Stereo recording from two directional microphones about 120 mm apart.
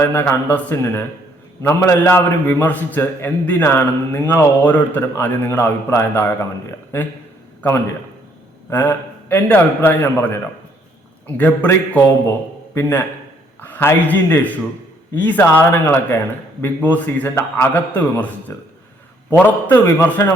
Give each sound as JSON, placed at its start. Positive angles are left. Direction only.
{"t": 0.0, "sound": "a man's voice", "side_deg": 20}
{"t": 8.7, "sound": "a man's voice", "side_deg": 15}